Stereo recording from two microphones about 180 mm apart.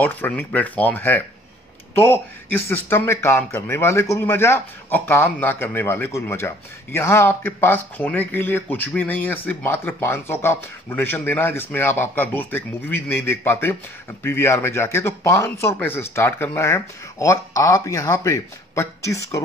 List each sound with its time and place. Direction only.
0.0 s speech: 10° left (ahead or behind)